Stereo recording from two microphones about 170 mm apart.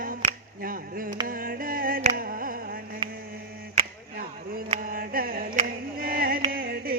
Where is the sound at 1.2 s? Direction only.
55° right (ahead or behind).